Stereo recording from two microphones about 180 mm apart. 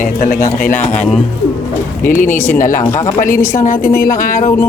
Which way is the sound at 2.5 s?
50° left (ahead or behind).